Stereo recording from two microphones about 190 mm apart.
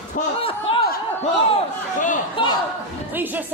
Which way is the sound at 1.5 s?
40° left (ahead or behind).